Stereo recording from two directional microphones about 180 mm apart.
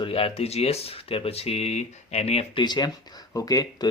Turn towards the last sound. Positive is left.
turn(degrees=20)  # may be behind; listen again after turning